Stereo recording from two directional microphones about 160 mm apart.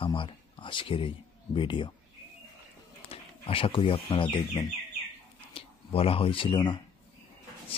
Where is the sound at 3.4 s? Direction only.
35° left (ahead or behind).